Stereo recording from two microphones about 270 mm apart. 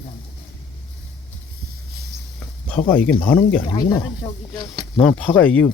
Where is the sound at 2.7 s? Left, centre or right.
Centre.